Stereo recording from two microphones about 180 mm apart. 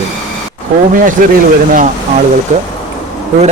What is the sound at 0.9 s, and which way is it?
Speech, 50° right (ahead or behind).